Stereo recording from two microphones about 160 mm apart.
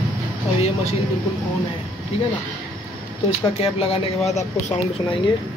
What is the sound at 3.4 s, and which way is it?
Speech, 35° left (ahead or behind).